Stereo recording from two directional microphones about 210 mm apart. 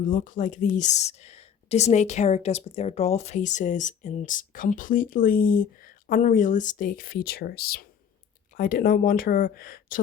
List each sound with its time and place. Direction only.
0.0 s speech: 40° left (ahead or behind)